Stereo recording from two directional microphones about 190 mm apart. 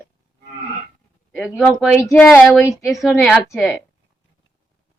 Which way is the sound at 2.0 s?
15° left (ahead or behind).